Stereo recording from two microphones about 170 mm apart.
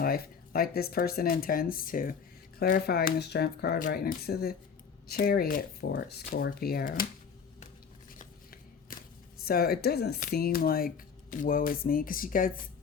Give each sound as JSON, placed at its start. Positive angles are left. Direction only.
{"t": 0.0, "sound": "speech", "side_deg": 60}
{"t": 3.8, "sound": "speech", "side_deg": 55}
{"t": 8.2, "sound": "shuffling cards", "side_deg": 55}
{"t": 9.4, "sound": "speech", "side_deg": 60}